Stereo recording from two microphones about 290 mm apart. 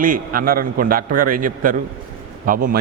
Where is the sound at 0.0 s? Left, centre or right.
Right.